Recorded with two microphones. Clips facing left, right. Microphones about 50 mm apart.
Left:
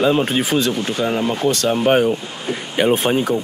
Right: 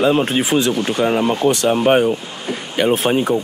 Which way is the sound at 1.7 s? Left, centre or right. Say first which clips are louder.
Right 1 dB; centre.